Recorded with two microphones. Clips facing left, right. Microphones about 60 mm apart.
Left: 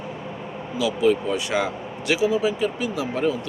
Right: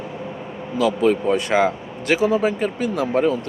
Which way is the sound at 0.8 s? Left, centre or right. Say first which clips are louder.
Right 3 dB; right.